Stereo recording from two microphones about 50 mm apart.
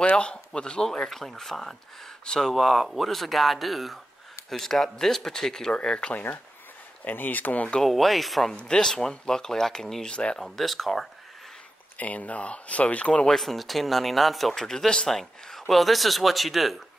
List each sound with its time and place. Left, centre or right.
0.1 s speech: centre
2.5 s speech: centre
7.1 s speech: left
7.8 s speech: centre
8.5 s speech: centre
10.0 s speech: centre
10.4 s speech: centre
12.0 s speech: left
13.3 s speech: centre